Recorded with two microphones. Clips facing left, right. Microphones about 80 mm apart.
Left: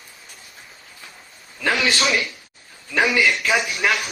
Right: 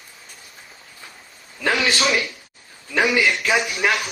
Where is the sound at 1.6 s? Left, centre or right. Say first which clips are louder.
Even; right.